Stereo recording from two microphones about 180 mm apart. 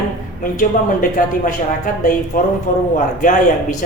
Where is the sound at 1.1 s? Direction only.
50° left (ahead or behind).